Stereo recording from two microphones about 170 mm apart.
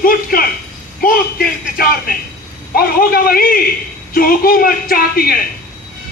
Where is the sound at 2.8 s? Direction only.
60° left (ahead or behind).